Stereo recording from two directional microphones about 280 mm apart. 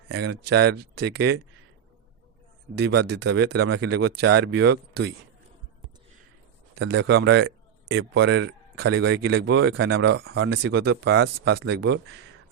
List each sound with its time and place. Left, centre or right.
0.1 s speech: right
2.7 s speech: right
6.7 s speech: right